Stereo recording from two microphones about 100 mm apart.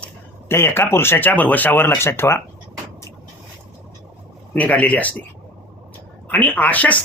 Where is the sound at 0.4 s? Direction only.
25° left (ahead or behind).